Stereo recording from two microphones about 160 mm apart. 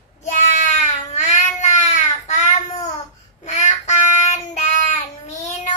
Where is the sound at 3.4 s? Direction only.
45° left (ahead or behind).